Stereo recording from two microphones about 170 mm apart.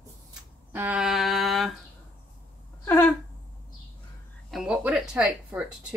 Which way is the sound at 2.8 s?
15° left (ahead or behind).